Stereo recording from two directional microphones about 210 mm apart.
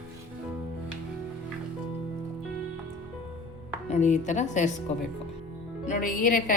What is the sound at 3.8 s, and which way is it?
Speech, 35° left (ahead or behind).